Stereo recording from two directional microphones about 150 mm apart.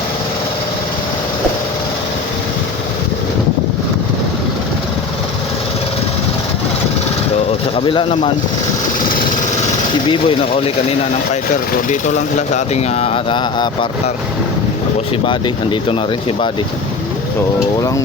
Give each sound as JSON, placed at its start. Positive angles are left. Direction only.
{"t": 7.8, "sound": "speech", "side_deg": 35}
{"t": 10.1, "sound": "speech", "side_deg": 35}
{"t": 11.3, "sound": "speech", "side_deg": 55}
{"t": 15.3, "sound": "speech", "side_deg": 35}